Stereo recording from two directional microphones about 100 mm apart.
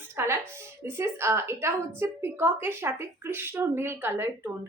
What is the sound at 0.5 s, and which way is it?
A woman's voice, 25° right (ahead or behind).